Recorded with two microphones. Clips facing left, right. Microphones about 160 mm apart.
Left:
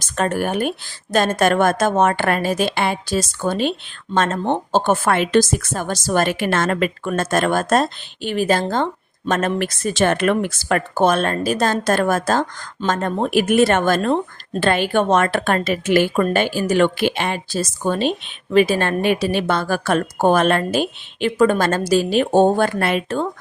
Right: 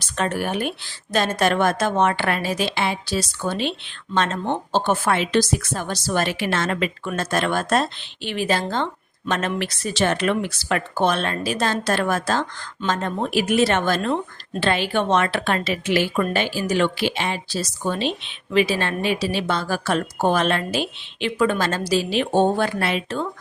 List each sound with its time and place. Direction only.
0.0 s speech: 45° left (ahead or behind)